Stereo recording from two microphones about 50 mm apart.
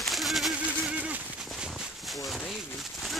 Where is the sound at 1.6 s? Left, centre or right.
Centre.